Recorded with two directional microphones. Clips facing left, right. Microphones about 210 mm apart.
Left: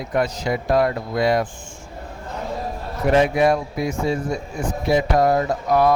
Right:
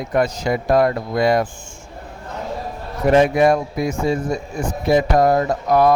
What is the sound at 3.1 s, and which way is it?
A man's voice, 45° right (ahead or behind).